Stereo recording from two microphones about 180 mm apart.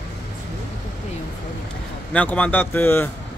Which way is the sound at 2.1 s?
5° left (ahead or behind).